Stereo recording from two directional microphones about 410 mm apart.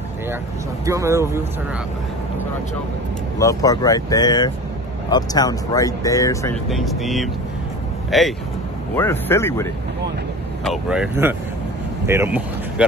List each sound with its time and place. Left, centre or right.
0.8 s speech: centre
3.3 s speech: centre